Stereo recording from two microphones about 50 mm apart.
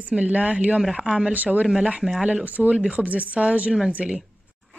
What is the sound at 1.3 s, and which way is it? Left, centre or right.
A woman's voice, right.